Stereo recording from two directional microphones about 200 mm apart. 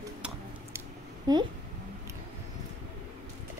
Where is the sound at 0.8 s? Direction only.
20° right (ahead or behind).